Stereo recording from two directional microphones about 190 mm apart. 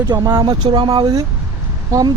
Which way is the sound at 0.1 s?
25° right (ahead or behind).